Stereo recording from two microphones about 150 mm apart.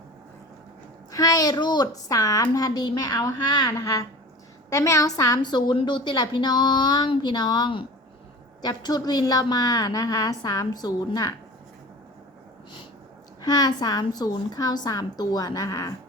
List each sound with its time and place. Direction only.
1.1 s a woman's voice: 25° left (ahead or behind)
13.4 s a woman's voice: 25° left (ahead or behind)